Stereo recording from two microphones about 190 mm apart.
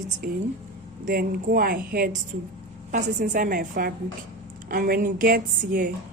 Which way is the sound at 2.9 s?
40° right (ahead or behind).